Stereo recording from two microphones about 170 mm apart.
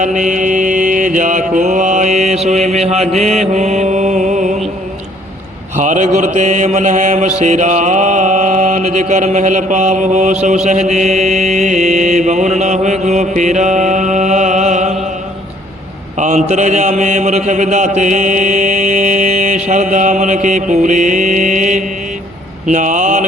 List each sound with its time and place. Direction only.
0.0 s mantra: 50° right (ahead or behind)
5.7 s speech: 45° right (ahead or behind)
10.4 s mantra: 45° right (ahead or behind)
16.1 s speech: 45° right (ahead or behind)
22.6 s a sound: 50° right (ahead or behind)